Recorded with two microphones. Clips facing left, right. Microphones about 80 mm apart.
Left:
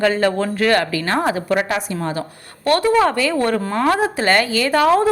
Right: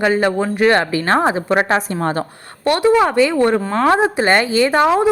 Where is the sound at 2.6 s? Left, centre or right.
Centre.